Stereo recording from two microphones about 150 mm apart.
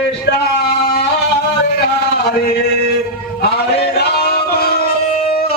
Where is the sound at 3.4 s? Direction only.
90° left.